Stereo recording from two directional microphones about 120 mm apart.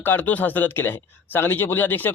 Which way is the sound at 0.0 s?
15° left (ahead or behind).